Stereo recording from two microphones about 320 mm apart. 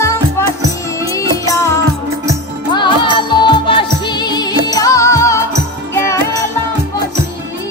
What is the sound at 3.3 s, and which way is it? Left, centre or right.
Music, centre.